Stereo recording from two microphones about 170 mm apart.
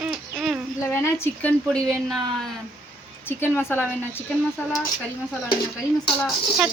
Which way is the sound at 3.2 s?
15° left (ahead or behind).